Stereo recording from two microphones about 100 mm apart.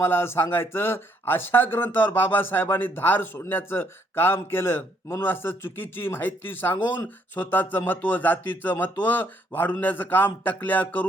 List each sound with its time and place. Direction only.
0.0 s a man's voice: 25° left (ahead or behind)